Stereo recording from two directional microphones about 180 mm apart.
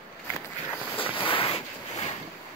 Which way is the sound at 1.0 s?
30° left (ahead or behind).